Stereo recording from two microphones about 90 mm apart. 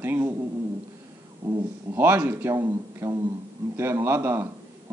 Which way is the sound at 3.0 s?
35° right (ahead or behind).